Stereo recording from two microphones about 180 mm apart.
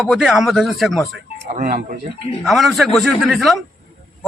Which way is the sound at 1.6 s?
55° right (ahead or behind).